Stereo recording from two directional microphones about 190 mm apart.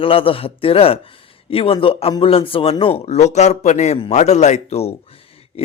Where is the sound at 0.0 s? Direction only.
30° left (ahead or behind).